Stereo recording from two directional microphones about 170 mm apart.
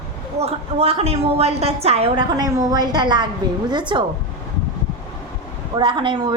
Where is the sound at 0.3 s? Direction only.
35° right (ahead or behind).